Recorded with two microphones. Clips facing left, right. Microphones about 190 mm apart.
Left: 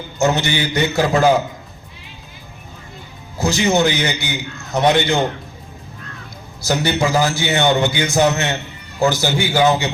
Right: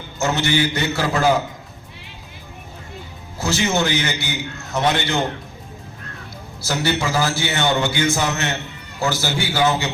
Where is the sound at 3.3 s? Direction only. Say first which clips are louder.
Left 4 dB; 15° left (ahead or behind).